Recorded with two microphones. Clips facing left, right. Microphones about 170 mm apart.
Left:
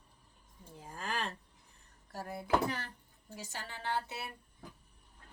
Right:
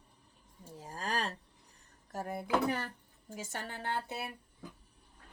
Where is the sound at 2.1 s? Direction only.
50° right (ahead or behind).